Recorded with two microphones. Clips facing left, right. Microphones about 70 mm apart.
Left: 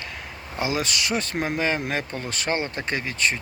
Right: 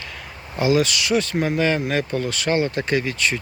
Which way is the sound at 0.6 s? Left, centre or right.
Left.